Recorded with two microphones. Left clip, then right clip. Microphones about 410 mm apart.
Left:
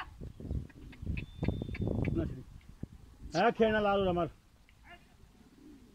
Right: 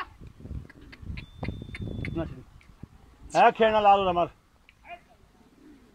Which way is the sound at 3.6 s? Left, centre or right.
Right.